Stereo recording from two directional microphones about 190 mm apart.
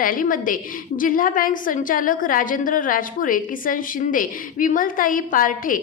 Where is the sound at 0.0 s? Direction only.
45° left (ahead or behind).